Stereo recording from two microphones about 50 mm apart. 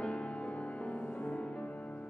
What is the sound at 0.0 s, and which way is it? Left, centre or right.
Music, left.